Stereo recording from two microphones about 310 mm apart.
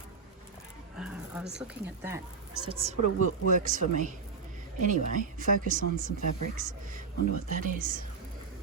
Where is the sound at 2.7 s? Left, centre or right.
Centre.